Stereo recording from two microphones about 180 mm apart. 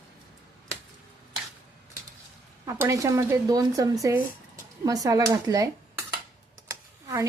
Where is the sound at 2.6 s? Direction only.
15° right (ahead or behind).